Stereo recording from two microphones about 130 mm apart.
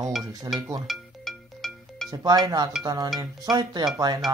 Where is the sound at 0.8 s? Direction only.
Centre (ahead or behind).